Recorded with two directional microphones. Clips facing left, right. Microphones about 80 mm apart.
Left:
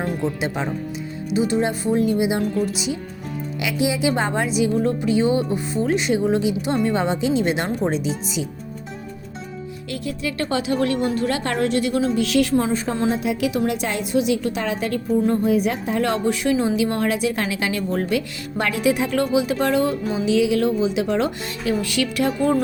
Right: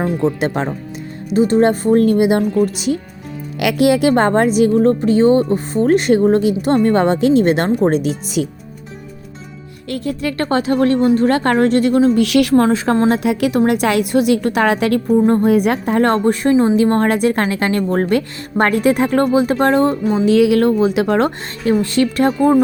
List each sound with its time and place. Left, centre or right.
0.3 s a woman's voice: right
3.6 s a woman's voice: right
8.4 s a woman's voice: right
9.9 s a woman's voice: right
12.1 s a woman's voice: right
13.1 s a woman's voice: right
20.1 s a woman's voice: right